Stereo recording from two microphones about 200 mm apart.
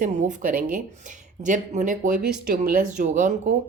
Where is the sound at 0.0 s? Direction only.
40° right (ahead or behind).